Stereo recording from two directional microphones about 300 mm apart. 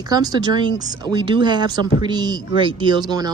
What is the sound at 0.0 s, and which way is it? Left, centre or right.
Speech, centre.